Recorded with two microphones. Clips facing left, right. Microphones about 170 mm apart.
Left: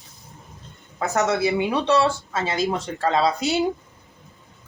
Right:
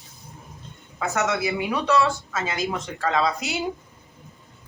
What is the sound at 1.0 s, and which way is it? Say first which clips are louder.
Speech: left 3 dB; 40° left (ahead or behind).